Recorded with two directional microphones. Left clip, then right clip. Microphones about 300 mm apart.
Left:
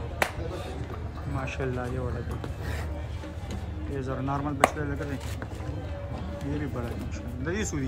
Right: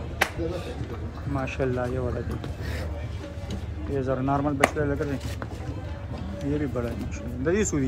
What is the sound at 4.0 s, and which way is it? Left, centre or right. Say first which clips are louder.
Speech: right 6 dB; centre.